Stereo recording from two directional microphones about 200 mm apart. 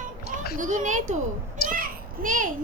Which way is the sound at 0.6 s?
40° right (ahead or behind).